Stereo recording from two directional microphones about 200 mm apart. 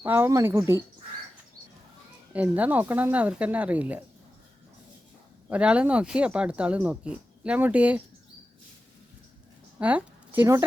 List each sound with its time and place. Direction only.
0.0 s speech: 10° right (ahead or behind)
2.3 s speech: 5° right (ahead or behind)
5.5 s speech: 5° right (ahead or behind)
9.7 s a woman's voice: 10° right (ahead or behind)